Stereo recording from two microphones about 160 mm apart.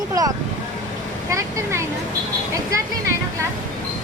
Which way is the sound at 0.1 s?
20° right (ahead or behind).